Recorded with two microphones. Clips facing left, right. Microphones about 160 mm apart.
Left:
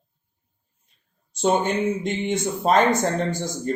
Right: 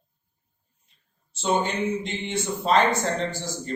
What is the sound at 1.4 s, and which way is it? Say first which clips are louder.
A man's voice: left 4 dB; 50° left (ahead or behind).